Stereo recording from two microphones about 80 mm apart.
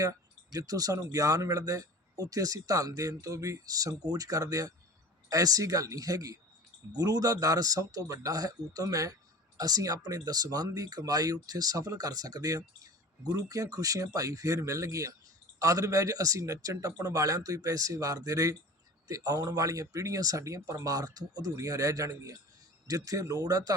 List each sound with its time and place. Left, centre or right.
0.5 s speech: right